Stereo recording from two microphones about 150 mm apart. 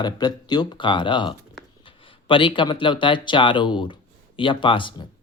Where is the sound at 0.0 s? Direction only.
25° left (ahead or behind).